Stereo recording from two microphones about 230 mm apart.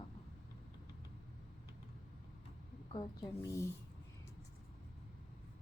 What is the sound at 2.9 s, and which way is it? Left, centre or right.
Speech, centre.